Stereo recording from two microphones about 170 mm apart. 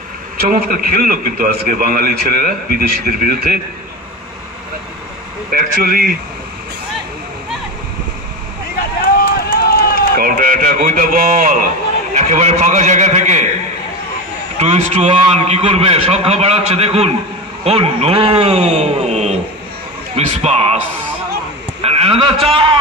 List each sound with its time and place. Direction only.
0.4 s a man's voice: 60° right (ahead or behind)
5.5 s a man's voice: 60° right (ahead or behind)
9.2 s run: 65° left (ahead or behind)
10.1 s a man's voice: 55° right (ahead or behind)
14.6 s a man's voice: 40° right (ahead or behind)
21.8 s a man's voice: 35° right (ahead or behind)